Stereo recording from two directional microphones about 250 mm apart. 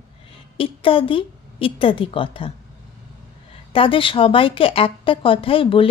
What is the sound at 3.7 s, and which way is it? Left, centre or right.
A woman's voice, left.